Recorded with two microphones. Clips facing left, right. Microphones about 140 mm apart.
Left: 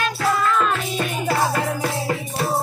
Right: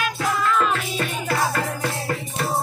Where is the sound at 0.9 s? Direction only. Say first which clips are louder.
Left 2 dB; 10° left (ahead or behind).